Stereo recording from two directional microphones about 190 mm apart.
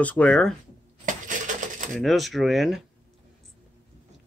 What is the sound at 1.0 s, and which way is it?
Coin, 45° right (ahead or behind).